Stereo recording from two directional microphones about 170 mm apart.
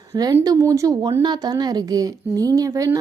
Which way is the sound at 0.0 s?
20° right (ahead or behind).